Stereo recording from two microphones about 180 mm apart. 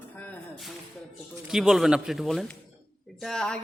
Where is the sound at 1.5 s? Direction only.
Centre (ahead or behind).